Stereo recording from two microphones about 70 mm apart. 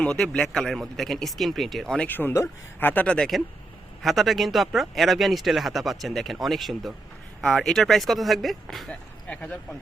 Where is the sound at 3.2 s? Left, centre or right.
Centre.